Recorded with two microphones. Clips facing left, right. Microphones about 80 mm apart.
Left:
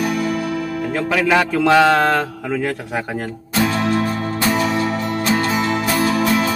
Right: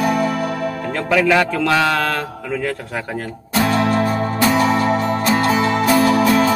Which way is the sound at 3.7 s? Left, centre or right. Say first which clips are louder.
Right 5 dB; right.